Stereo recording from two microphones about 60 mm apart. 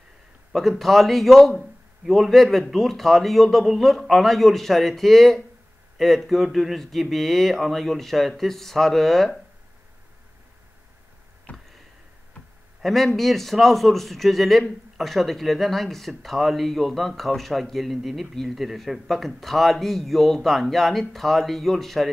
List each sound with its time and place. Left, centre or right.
0.5 s speech: centre
11.5 s tick: left
12.8 s speech: centre